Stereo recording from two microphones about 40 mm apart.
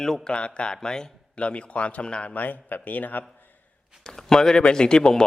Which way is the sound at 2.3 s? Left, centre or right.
Left.